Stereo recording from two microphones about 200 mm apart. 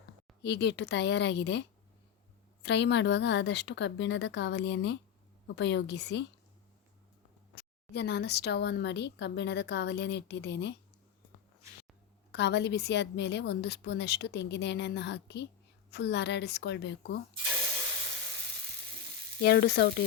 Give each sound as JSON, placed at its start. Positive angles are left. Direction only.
{"t": 0.4, "sound": "a woman's voice", "side_deg": 60}
{"t": 2.6, "sound": "a woman's voice", "side_deg": 60}
{"t": 7.9, "sound": "a woman's voice", "side_deg": 55}
{"t": 12.3, "sound": "a woman's voice", "side_deg": 60}
{"t": 19.4, "sound": "a woman's voice", "side_deg": 55}